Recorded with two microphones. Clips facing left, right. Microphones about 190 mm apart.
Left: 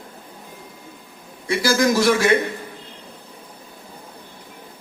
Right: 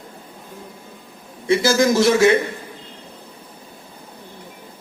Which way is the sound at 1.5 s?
25° right (ahead or behind).